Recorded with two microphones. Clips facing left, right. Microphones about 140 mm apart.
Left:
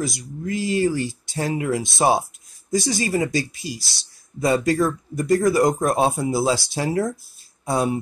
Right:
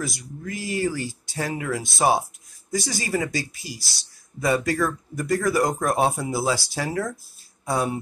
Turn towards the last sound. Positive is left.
turn(degrees=20)  # may be behind; listen again after turning